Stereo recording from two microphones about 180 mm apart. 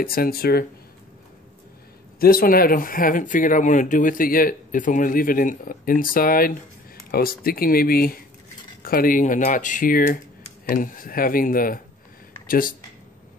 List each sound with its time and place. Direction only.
0.0 s speech: 55° left (ahead or behind)
2.1 s speech: 55° left (ahead or behind)